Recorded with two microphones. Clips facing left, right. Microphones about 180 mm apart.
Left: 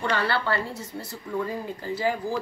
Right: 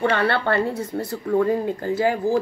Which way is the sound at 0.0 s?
55° right (ahead or behind).